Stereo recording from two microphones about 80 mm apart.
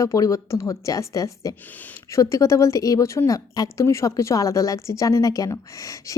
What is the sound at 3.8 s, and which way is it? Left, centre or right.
A woman's voice, left.